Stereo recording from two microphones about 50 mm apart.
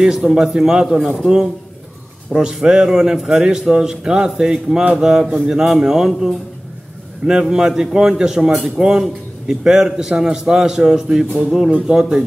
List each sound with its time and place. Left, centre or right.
0.0 s a man's voice: centre